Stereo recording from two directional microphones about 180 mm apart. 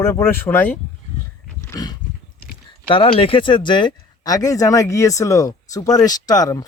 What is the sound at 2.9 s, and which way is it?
Speech, 30° left (ahead or behind).